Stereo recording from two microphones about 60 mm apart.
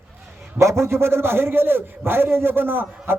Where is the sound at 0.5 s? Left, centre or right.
Right.